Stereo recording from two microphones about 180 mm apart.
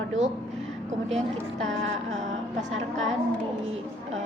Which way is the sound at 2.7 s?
90° right.